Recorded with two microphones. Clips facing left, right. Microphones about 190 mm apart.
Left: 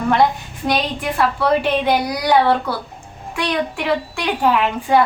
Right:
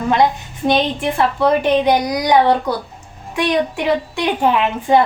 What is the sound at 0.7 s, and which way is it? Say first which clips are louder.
A woman's voice: right 4 dB; 25° right (ahead or behind).